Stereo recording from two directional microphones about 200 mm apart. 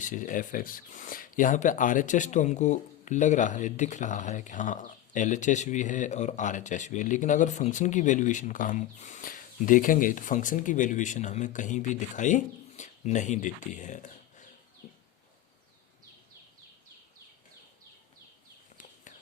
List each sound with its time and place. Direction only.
0.0 s speech: 40° left (ahead or behind)